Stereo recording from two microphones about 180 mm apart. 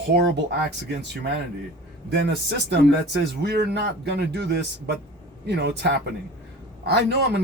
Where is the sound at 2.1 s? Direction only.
70° right (ahead or behind).